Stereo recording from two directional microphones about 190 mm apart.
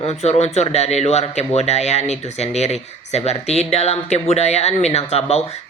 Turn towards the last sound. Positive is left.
turn(degrees=35)  # may be behind; listen again after turning